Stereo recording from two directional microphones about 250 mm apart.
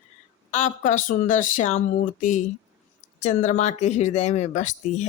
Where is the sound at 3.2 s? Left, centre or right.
Left.